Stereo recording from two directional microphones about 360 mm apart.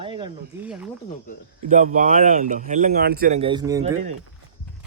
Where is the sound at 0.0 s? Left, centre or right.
Centre.